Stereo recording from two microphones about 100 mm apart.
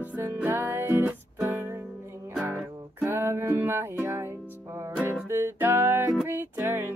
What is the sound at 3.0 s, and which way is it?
Music, 25° right (ahead or behind).